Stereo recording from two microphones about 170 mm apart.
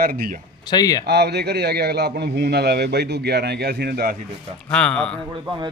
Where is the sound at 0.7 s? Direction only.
25° left (ahead or behind).